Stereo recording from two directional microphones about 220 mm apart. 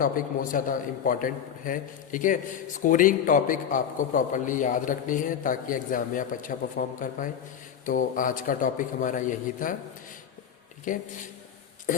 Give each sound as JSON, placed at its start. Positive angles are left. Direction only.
{"t": 0.0, "sound": "a man's voice", "side_deg": 40}
{"t": 10.9, "sound": "a man's voice", "side_deg": 35}